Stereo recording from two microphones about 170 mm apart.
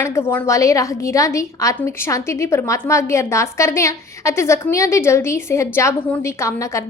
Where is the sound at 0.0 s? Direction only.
15° left (ahead or behind).